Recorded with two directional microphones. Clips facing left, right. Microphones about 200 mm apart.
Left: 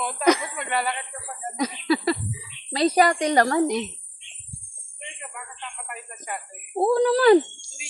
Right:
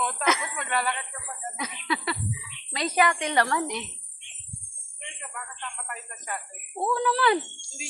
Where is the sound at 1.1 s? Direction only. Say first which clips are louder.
Left 7 dB; 35° left (ahead or behind).